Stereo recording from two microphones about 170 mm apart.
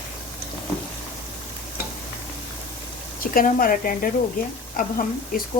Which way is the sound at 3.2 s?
55° left (ahead or behind).